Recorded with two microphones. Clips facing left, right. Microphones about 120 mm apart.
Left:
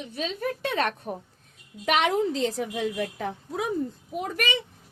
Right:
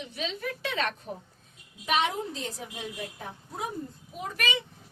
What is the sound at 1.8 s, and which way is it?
A woman's voice, 85° left.